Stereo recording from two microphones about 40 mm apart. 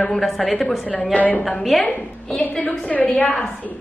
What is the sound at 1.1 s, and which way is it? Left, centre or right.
Speech, left.